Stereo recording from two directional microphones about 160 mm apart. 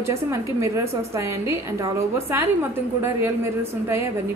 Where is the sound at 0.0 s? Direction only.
15° right (ahead or behind).